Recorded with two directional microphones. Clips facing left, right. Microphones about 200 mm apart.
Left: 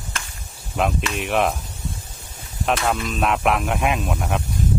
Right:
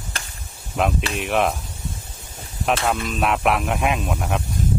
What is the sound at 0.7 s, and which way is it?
Speech, centre (ahead or behind).